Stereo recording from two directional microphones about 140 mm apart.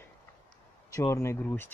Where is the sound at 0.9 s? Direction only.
20° left (ahead or behind).